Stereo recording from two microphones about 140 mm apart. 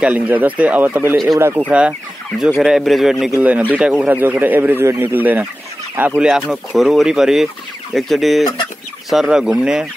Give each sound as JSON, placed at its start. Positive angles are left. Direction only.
{"t": 0.0, "sound": "speech", "side_deg": -10}
{"t": 1.7, "sound": "speech", "side_deg": -5}